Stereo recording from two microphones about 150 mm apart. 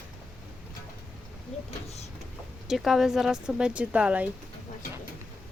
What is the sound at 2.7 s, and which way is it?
Speech, centre (ahead or behind).